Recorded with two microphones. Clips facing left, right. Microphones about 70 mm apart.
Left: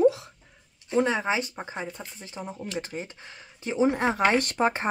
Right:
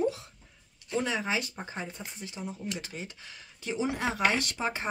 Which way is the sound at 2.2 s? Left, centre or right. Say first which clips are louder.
Left 2 dB; left.